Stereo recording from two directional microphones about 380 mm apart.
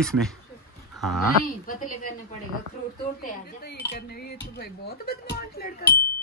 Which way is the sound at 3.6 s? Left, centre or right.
Left.